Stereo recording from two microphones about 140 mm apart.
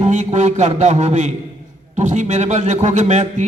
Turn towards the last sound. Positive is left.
turn(degrees=-60)  # may be behind; listen again after turning